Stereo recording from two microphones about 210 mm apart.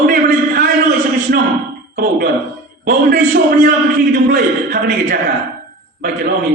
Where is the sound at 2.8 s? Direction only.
40° right (ahead or behind).